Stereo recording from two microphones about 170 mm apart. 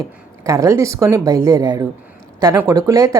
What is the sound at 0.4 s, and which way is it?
Speech, 20° right (ahead or behind).